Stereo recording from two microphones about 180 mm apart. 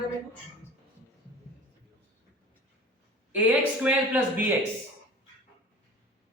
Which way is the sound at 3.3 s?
10° right (ahead or behind).